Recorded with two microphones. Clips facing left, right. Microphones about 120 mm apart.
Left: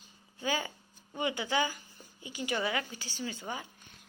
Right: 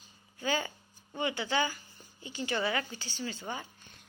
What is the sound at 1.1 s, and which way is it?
A woman's voice, 15° left (ahead or behind).